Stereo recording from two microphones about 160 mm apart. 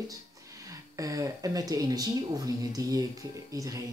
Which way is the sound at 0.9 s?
20° right (ahead or behind).